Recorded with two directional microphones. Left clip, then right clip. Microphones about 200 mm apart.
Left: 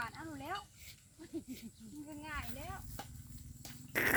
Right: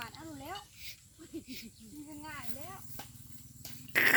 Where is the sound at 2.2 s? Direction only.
5° right (ahead or behind).